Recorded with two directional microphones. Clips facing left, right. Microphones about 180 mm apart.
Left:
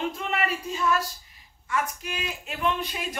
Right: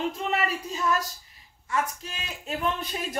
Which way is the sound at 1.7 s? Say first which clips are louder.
Even; 35° right (ahead or behind).